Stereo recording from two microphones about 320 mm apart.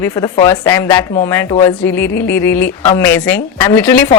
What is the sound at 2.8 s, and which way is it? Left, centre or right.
Speech, centre.